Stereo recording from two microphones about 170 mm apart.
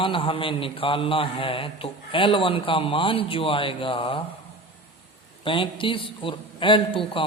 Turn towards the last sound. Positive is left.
turn(degrees=30)  # may be behind; listen again after turning